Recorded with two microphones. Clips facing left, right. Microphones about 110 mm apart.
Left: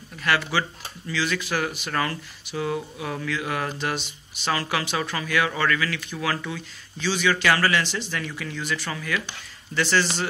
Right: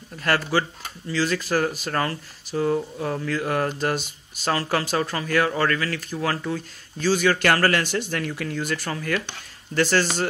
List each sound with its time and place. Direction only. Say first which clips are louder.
0.2 s speech: right 2 dB; 40° right (ahead or behind)